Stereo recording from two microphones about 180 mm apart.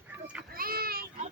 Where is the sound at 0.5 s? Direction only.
55° right (ahead or behind).